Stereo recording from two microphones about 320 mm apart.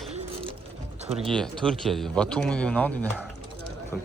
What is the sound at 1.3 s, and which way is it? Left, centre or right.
Speech, centre.